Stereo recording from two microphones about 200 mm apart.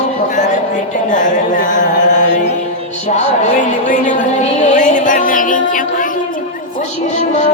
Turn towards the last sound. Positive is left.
turn(degrees=40)  # may be behind; listen again after turning